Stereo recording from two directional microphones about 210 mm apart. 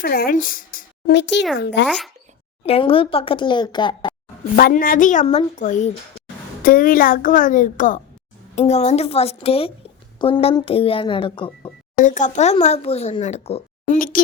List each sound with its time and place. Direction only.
0.0 s speech: 45° left (ahead or behind)
2.6 s a woman's voice: 25° left (ahead or behind)
4.5 s a woman's voice: 40° left (ahead or behind); by 11.7 s 25° left (ahead or behind)
12.0 s speech: 35° left (ahead or behind)